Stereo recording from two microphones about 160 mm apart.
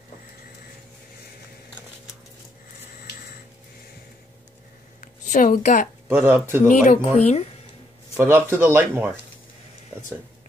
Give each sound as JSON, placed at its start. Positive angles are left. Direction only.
{"t": 5.0, "sound": "a sound", "side_deg": 50}
{"t": 6.0, "sound": "speech", "side_deg": -15}
{"t": 6.7, "sound": "speech", "side_deg": 50}
{"t": 8.2, "sound": "speech", "side_deg": -15}